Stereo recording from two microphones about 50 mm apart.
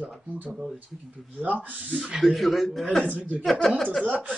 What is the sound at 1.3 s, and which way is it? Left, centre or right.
Speech, right.